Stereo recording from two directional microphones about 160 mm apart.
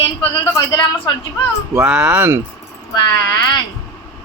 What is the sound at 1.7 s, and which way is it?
Speech, 10° right (ahead or behind).